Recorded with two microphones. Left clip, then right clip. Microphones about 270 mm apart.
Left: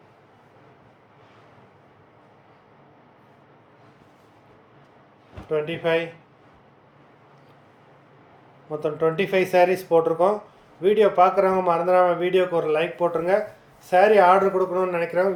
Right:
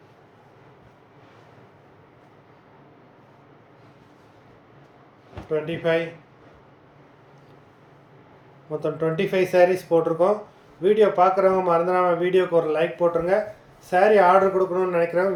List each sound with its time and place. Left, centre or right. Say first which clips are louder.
5.5 s a man's voice: even; centre
8.7 s a man's voice: left 2 dB; centre